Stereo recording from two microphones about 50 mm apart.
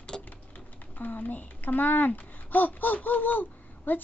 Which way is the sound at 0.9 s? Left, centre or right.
Left.